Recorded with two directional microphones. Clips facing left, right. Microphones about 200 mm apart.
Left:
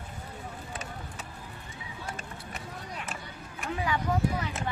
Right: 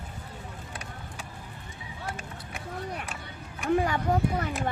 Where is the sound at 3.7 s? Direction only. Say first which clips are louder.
Right 5 dB; 50° right (ahead or behind).